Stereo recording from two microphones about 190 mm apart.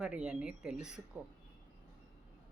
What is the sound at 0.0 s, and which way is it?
Speech, 5° right (ahead or behind).